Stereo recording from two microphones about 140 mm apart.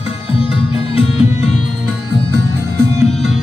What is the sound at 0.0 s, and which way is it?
Music, 45° left (ahead or behind).